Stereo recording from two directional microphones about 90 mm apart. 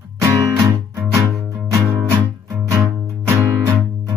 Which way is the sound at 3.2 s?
20° right (ahead or behind).